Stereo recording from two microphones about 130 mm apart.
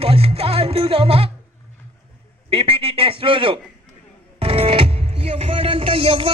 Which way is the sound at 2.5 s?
45° right (ahead or behind).